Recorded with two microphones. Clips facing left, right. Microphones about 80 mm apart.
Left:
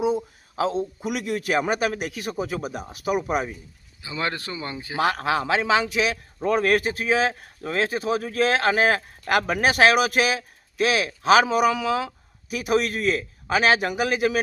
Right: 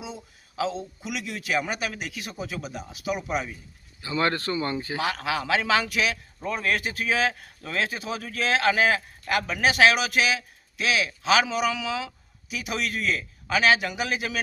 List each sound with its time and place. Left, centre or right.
0.0 s a man's voice: left
4.0 s speech: centre
4.9 s speech: left
6.4 s speech: left
6.7 s speech: left